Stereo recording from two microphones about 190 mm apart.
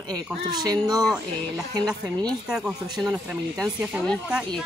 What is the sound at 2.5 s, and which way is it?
Speech, 5° right (ahead or behind).